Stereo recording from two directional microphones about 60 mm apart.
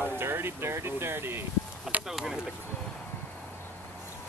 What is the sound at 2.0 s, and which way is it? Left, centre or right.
Speech, centre.